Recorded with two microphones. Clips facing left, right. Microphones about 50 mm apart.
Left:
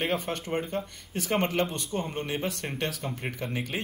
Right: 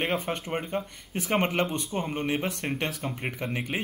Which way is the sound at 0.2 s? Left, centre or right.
Centre.